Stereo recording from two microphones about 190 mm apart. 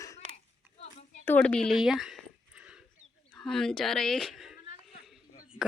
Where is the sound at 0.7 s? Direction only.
35° left (ahead or behind).